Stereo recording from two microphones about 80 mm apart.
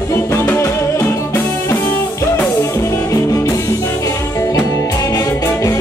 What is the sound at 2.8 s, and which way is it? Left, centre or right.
Music, left.